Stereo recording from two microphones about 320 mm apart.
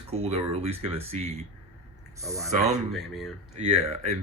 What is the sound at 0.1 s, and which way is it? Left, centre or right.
A man's voice, centre.